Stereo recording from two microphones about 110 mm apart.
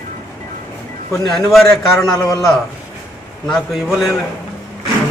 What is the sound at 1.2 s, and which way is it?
Speech, centre (ahead or behind).